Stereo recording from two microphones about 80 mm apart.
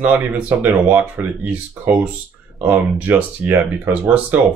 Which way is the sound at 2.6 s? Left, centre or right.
Right.